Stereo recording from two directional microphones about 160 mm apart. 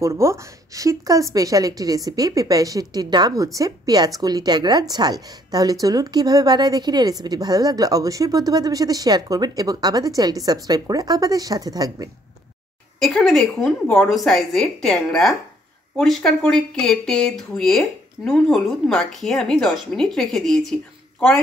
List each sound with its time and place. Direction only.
0.0 s a woman's voice: 20° right (ahead or behind)
13.0 s speech: centre (ahead or behind)